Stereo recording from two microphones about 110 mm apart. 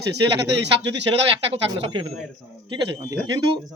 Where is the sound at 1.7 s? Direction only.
50° right (ahead or behind).